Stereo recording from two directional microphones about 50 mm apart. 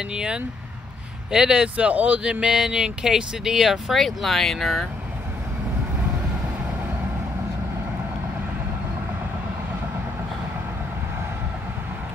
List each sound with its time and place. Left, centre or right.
0.1 s speech: centre
2.4 s speech: centre
3.9 s speech: centre